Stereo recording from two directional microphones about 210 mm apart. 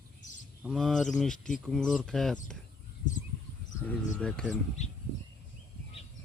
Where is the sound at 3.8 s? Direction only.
5° left (ahead or behind).